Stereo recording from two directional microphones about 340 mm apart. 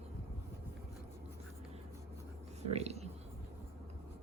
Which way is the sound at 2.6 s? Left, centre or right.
Centre.